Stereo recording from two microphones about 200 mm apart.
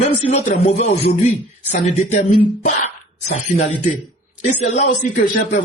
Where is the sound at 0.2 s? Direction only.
35° left (ahead or behind).